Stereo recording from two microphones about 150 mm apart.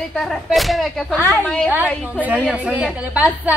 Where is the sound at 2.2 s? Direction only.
10° right (ahead or behind).